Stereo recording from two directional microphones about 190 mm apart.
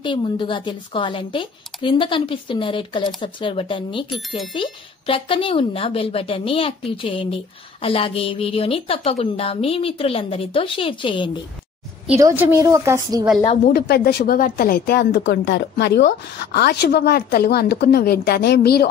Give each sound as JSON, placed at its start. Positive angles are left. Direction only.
{"t": 0.0, "sound": "a woman's voice", "side_deg": 25}
{"t": 12.2, "sound": "a woman's voice", "side_deg": -15}
{"t": 13.7, "sound": "a woman's voice", "side_deg": 55}